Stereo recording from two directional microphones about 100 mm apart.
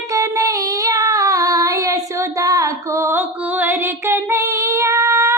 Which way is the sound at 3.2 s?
20° right (ahead or behind).